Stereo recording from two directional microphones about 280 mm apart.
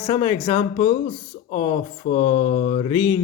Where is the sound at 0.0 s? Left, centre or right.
Left.